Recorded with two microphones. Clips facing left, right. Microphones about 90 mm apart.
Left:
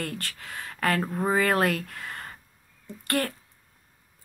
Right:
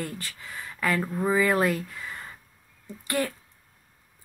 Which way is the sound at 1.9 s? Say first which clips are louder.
Left 1 dB; 55° left (ahead or behind).